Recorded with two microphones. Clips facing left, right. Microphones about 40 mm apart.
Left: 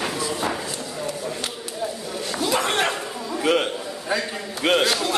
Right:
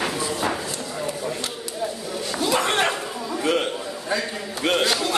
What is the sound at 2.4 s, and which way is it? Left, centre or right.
Chatter, centre.